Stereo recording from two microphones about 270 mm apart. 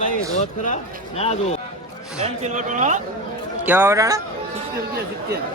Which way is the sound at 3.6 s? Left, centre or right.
Centre.